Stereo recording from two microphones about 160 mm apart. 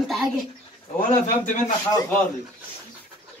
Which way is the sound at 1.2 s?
55° left (ahead or behind).